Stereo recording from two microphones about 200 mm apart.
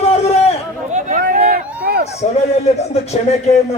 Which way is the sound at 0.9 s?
40° right (ahead or behind).